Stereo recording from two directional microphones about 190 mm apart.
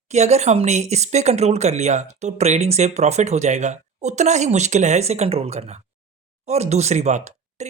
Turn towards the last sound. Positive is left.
turn(degrees=-40)  # may be behind; listen again after turning